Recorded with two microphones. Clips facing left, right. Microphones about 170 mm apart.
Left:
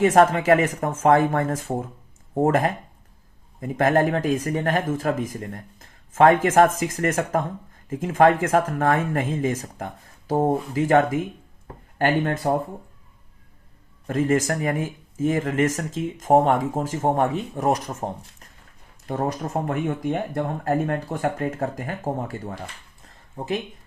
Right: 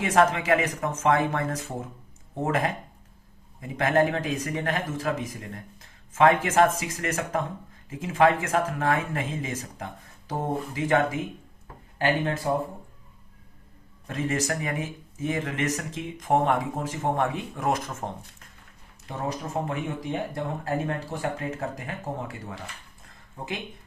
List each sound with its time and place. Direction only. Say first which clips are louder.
0.0 s speech: left 5 dB; 45° left (ahead or behind)
11.9 s speech: left 4 dB; 55° left (ahead or behind)
14.1 s speech: left 7 dB; 50° left (ahead or behind)
19.0 s speech: left 6 dB; 50° left (ahead or behind)